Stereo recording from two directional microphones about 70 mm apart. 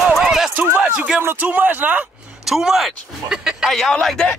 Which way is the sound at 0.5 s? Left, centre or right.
Centre.